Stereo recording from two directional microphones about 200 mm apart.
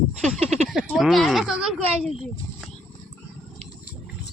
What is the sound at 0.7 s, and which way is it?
Speech, centre (ahead or behind).